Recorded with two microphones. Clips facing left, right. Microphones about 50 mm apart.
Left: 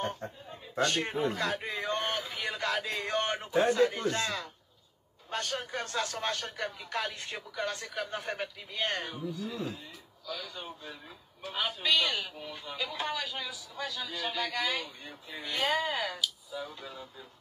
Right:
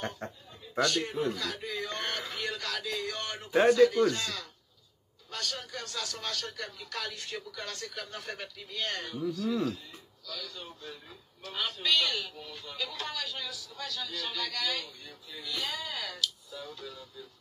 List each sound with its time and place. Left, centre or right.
0.5 s speech: left
2.1 s a man's voice: centre; by 16.2 s left
16.2 s speech: centre
16.8 s a man's voice: left